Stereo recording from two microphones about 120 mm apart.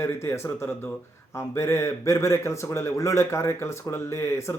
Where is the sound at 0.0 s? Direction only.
20° left (ahead or behind).